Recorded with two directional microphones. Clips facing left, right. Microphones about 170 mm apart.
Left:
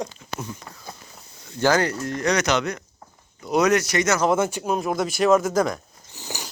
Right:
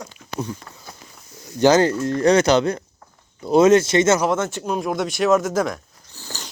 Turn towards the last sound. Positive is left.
turn(degrees=15)  # may be behind; listen again after turning